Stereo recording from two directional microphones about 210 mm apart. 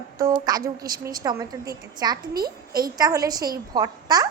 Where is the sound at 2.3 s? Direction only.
45° right (ahead or behind).